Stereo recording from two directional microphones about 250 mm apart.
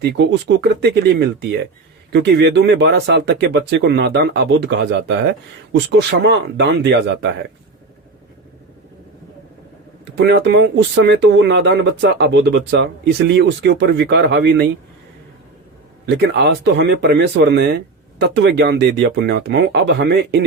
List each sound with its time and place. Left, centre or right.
0.0 s speech: right
10.2 s speech: right
16.0 s speech: right